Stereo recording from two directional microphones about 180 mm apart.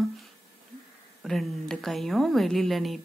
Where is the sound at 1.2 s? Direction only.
Centre (ahead or behind).